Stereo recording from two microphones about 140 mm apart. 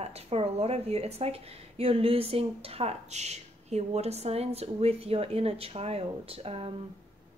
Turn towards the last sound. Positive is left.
turn(degrees=-45)  # may be behind; listen again after turning